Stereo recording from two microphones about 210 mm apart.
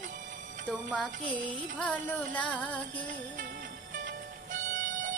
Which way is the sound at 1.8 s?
5° left (ahead or behind).